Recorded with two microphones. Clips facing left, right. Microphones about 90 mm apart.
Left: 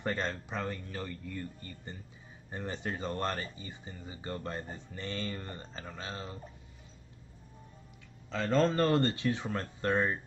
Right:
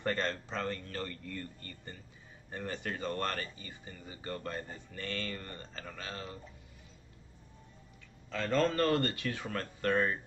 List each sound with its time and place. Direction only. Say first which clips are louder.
0.0 s speech: right 1 dB; 15° left (ahead or behind)
8.3 s speech: left 2 dB; 20° left (ahead or behind)